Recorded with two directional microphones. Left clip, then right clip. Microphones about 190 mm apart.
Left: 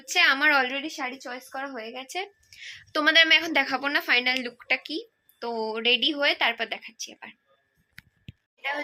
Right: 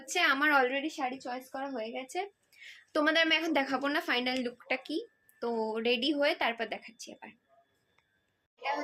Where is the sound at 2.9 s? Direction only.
5° right (ahead or behind).